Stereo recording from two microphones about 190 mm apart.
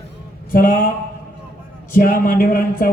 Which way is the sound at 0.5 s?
50° left (ahead or behind).